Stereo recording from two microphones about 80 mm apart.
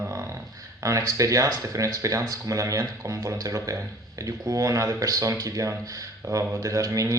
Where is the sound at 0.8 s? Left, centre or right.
Right.